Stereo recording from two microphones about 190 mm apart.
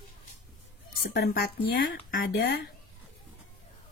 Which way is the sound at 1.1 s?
60° left (ahead or behind).